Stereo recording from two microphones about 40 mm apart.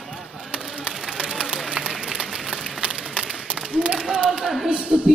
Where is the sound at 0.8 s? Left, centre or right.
Centre.